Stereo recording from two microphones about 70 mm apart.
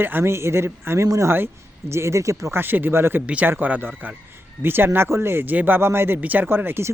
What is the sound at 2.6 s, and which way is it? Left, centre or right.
Speech, right.